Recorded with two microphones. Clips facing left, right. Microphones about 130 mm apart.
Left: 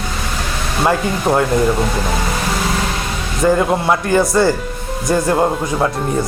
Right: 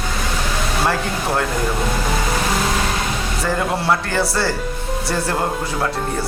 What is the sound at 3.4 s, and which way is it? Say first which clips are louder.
A man's voice: left 6 dB; 15° left (ahead or behind).